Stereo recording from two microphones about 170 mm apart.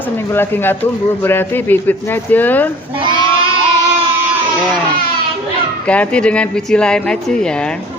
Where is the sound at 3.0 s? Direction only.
30° right (ahead or behind).